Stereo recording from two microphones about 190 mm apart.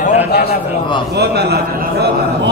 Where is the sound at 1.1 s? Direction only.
60° right (ahead or behind).